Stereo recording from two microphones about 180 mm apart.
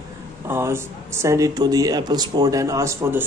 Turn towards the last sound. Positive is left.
turn(degrees=-15)  # may be behind; listen again after turning